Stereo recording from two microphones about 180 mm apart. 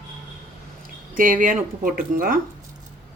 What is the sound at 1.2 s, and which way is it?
Speech, 50° right (ahead or behind).